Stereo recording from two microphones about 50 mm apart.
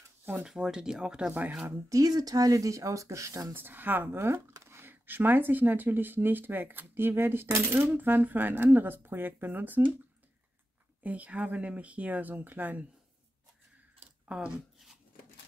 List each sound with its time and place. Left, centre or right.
0.5 s speech: centre
1.9 s speech: right
3.5 s speech: right
4.1 s a sound: right
5.0 s speech: right
11.0 s speech: right
14.3 s speech: centre